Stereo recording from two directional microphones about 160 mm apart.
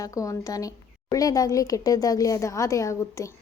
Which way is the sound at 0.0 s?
20° left (ahead or behind).